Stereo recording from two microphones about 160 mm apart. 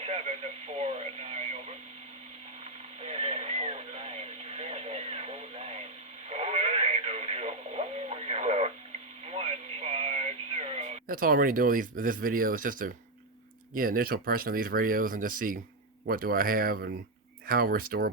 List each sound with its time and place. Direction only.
0.0 s speech: 40° right (ahead or behind)
3.0 s music: 45° right (ahead or behind)
6.2 s radio: 40° right (ahead or behind)
11.1 s speech: 60° right (ahead or behind)